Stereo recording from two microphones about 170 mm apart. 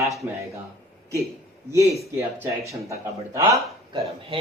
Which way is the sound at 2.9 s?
15° right (ahead or behind).